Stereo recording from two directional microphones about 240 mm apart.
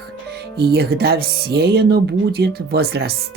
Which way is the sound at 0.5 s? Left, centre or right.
Right.